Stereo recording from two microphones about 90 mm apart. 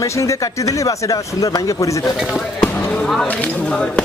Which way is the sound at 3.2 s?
15° left (ahead or behind).